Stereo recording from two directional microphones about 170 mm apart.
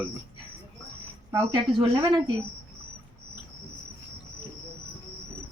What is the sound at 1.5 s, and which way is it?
Speech, 30° right (ahead or behind).